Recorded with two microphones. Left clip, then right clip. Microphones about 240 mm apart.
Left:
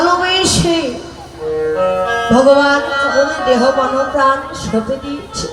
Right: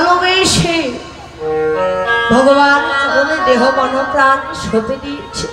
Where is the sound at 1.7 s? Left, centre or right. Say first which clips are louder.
Left 1 dB; right.